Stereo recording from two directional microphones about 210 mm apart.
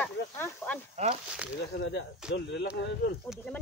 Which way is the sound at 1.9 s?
55° left (ahead or behind).